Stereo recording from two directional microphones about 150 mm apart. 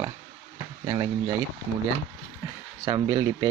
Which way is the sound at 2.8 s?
25° right (ahead or behind).